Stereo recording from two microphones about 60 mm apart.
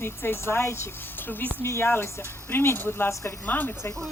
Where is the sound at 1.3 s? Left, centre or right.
Left.